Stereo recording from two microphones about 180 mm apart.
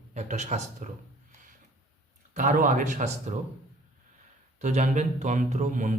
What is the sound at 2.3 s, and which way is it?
Speech, 45° right (ahead or behind).